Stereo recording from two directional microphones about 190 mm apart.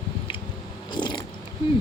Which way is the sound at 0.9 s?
25° left (ahead or behind).